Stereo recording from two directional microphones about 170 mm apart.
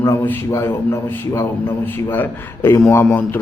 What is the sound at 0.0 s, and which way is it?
A man's voice, 15° left (ahead or behind).